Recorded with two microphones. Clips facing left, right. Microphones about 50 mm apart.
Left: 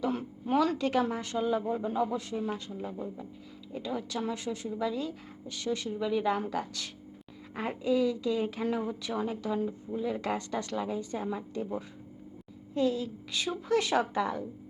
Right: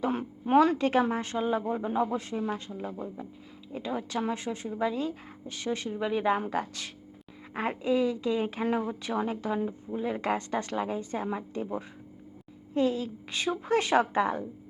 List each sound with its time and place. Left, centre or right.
0.0 s a woman's voice: right